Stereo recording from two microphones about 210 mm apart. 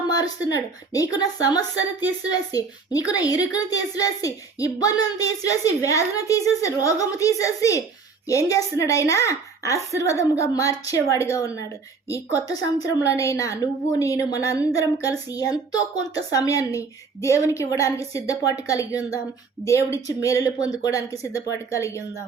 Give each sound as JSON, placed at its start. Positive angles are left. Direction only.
{"t": 0.1, "sound": "a woman's voice", "side_deg": 15}